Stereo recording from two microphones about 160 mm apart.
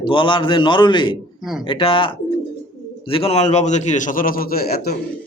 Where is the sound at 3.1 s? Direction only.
40° left (ahead or behind); by 5.0 s 70° left (ahead or behind).